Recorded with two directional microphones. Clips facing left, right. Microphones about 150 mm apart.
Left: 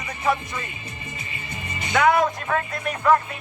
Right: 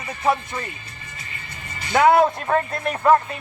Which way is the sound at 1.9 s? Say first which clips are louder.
Right 3 dB; 30° right (ahead or behind).